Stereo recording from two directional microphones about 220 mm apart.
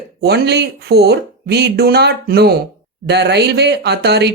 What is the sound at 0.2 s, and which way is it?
Speech, 45° right (ahead or behind).